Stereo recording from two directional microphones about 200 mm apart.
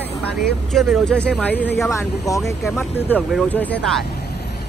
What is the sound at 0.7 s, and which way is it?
Speech, centre (ahead or behind).